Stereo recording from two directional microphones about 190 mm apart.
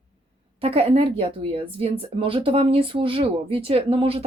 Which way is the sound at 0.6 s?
30° right (ahead or behind).